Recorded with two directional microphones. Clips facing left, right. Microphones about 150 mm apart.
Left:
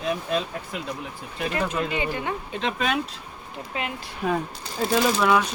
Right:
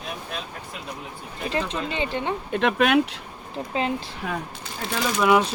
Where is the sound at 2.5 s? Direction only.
60° right (ahead or behind).